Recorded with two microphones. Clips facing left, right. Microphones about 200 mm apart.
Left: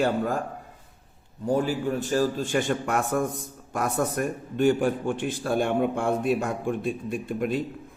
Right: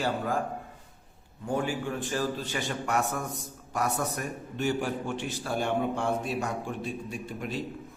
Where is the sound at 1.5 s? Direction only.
40° left (ahead or behind); by 7.6 s 55° left (ahead or behind).